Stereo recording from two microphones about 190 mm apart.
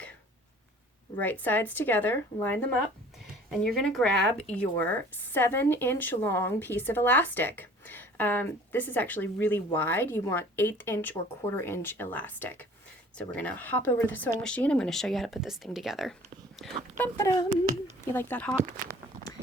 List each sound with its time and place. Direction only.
1.2 s speech: 10° left (ahead or behind)
3.8 s speech: 5° left (ahead or behind)
17.0 s speech: 15° left (ahead or behind)